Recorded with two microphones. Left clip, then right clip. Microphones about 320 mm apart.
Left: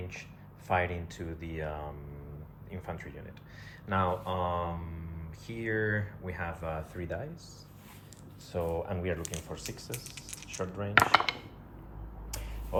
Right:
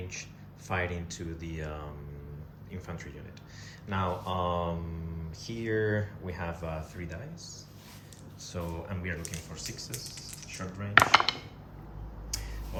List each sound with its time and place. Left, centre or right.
0.7 s speech: centre
8.4 s speech: centre
10.9 s speech: centre
12.3 s a sound: centre